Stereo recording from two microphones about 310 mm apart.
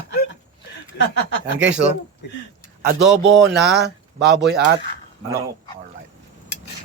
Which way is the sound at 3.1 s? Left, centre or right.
Right.